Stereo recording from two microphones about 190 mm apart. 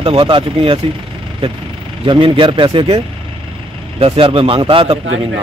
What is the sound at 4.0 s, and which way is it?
Speech, 30° right (ahead or behind).